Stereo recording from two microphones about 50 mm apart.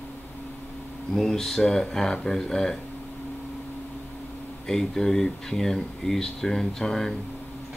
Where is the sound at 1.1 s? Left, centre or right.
Centre.